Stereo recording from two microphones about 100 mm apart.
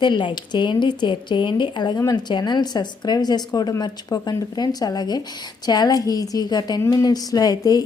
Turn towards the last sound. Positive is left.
turn(degrees=40)  # may be behind; listen again after turning